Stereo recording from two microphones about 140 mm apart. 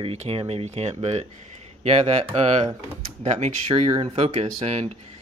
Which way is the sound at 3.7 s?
40° right (ahead or behind).